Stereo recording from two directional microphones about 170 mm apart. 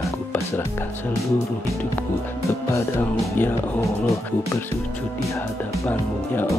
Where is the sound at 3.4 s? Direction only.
10° left (ahead or behind).